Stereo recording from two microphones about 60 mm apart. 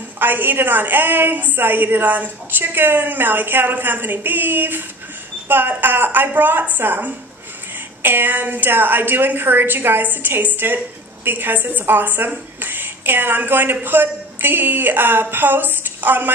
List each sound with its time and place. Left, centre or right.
0.2 s a woman's voice: right